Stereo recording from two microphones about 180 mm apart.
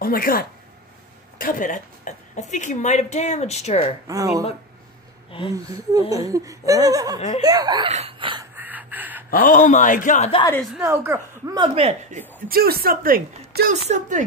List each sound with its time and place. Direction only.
0.0 s a woman's voice: 55° left (ahead or behind); by 3.9 s 35° left (ahead or behind)
4.1 s speech: 20° right (ahead or behind)
5.3 s speech: 30° left (ahead or behind)
5.7 s speech: 20° right (ahead or behind)
7.2 s a woman's voice: 40° left (ahead or behind)
7.4 s speech: 20° right (ahead or behind)
7.9 s a sound: 30° right (ahead or behind)
8.5 s a sound: 10° right (ahead or behind)
9.3 s a man's voice: 50° left (ahead or behind)
10.8 s speech: 15° right (ahead or behind)
11.7 s speech: 35° right (ahead or behind)
12.4 s a woman's voice: 55° right (ahead or behind)